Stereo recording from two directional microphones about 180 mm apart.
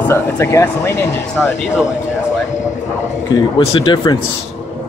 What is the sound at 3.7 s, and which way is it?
Speech, 25° left (ahead or behind).